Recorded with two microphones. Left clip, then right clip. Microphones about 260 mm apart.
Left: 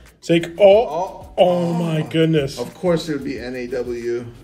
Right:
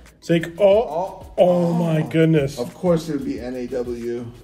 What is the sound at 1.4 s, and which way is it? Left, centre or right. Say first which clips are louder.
Speech: right 1 dB; left.